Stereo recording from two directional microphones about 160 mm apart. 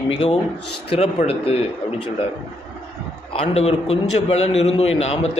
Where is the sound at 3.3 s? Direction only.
40° left (ahead or behind).